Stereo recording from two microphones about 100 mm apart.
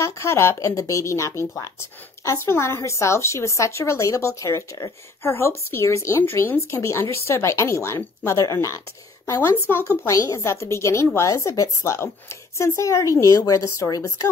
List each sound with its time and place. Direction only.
0.0 s a woman's voice: 25° left (ahead or behind)